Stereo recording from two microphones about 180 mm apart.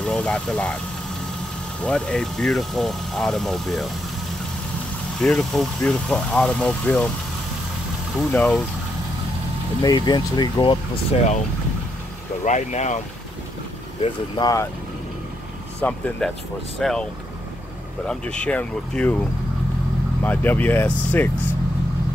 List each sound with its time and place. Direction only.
0.0 s speech: 5° left (ahead or behind)
1.8 s speech: 5° left (ahead or behind)
5.2 s speech: centre (ahead or behind)
8.2 s speech: 5° left (ahead or behind)
9.8 s speech: 25° left (ahead or behind)
12.4 s speech: 40° left (ahead or behind)
14.0 s speech: 25° left (ahead or behind)
15.8 s speech: 10° left (ahead or behind)
18.0 s speech: 5° left (ahead or behind)
20.2 s speech: 10° left (ahead or behind)